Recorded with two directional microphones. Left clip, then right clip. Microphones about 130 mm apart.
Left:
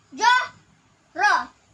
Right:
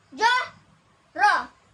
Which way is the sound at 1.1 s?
25° right (ahead or behind).